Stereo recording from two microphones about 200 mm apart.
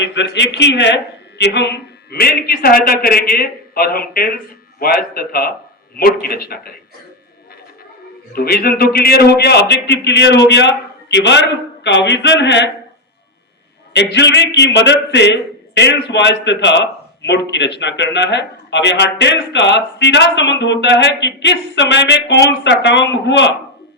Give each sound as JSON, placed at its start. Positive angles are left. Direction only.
{"t": 0.0, "sound": "a man's voice", "side_deg": 60}
{"t": 8.3, "sound": "a man's voice", "side_deg": 50}
{"t": 13.9, "sound": "a man's voice", "side_deg": 60}